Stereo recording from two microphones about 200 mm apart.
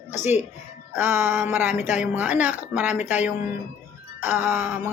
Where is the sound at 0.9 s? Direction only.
10° right (ahead or behind).